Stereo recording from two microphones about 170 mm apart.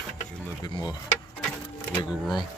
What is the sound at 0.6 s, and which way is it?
Speech, 25° left (ahead or behind).